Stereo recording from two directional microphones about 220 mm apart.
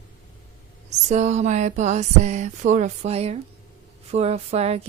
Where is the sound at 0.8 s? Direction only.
30° right (ahead or behind).